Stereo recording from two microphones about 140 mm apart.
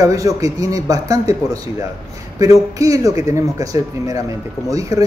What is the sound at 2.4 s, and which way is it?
A man's voice, 25° right (ahead or behind).